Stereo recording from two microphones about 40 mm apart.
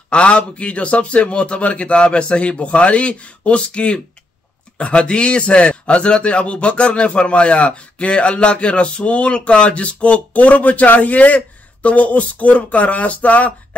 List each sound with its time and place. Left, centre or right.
0.1 s a man's voice: left